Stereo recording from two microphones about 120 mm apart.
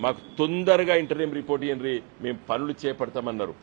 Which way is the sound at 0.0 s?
20° right (ahead or behind).